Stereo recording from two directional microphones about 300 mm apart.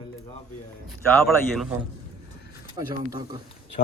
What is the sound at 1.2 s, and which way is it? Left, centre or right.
Speech, centre.